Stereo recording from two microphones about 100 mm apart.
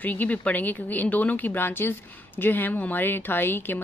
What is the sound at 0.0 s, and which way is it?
Speech, 15° left (ahead or behind).